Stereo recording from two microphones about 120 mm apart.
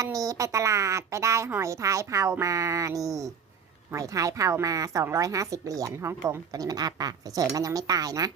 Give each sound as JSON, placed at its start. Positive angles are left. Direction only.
{"t": 0.0, "sound": "a woman's voice", "side_deg": -30}